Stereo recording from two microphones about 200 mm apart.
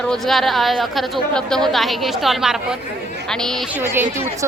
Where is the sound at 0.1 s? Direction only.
Centre (ahead or behind).